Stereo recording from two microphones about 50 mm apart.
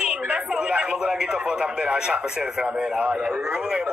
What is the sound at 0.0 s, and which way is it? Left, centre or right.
Speech, right.